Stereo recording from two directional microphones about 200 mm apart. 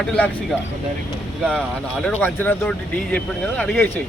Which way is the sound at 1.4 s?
5° left (ahead or behind).